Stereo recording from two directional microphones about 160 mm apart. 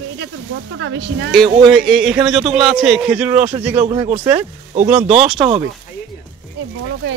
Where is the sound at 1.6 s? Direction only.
Centre (ahead or behind).